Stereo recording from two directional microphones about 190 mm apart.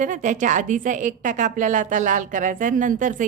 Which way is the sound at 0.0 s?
40° right (ahead or behind).